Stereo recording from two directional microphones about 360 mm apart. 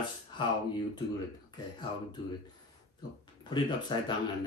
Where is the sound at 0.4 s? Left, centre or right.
Centre.